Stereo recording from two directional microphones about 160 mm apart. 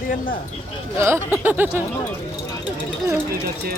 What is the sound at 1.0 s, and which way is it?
Speech, 15° right (ahead or behind).